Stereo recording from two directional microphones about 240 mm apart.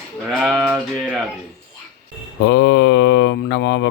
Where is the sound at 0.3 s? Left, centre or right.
Centre.